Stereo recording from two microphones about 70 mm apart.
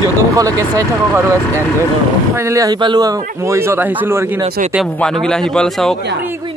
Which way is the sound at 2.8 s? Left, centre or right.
Right.